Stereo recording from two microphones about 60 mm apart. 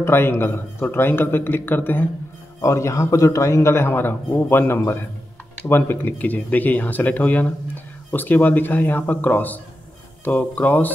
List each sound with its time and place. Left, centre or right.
0.0 s a man's voice: left
2.6 s a man's voice: left
6.1 s a man's voice: left